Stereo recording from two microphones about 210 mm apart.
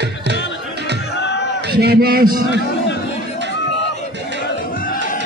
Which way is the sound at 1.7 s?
50° right (ahead or behind).